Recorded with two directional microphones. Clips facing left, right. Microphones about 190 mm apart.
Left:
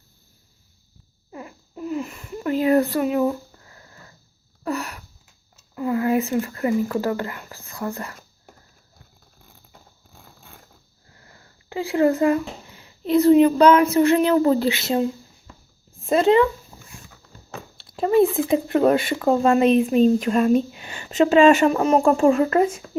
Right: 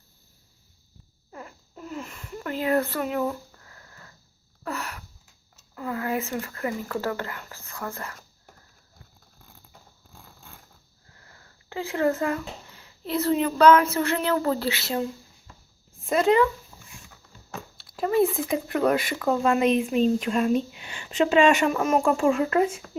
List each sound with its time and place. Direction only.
1.3 s a sound: 15° left (ahead or behind)
4.6 s a sound: 15° left (ahead or behind)
5.7 s speech: 20° left (ahead or behind)
11.7 s a child's voice: 15° left (ahead or behind)
16.0 s speech: 30° left (ahead or behind)
16.7 s dog: 25° left (ahead or behind)
17.7 s speech: 25° left (ahead or behind); by 22.7 s 40° left (ahead or behind)